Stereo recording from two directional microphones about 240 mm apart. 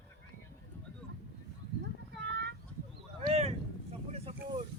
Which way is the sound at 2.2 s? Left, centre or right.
Right.